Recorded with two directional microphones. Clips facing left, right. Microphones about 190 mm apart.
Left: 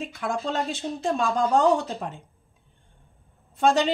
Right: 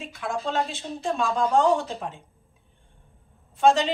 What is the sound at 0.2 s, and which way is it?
Speech, 40° left (ahead or behind).